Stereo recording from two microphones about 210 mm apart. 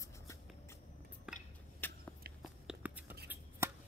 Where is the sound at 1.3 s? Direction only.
5° right (ahead or behind).